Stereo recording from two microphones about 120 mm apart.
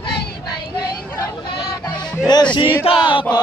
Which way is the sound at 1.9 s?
40° left (ahead or behind).